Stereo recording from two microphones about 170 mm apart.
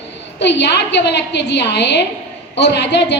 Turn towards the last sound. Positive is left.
turn(degrees=85)